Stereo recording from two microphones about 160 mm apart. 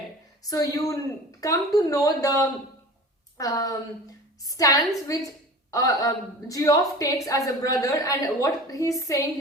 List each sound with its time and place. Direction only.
0.4 s a woman's voice: 20° left (ahead or behind)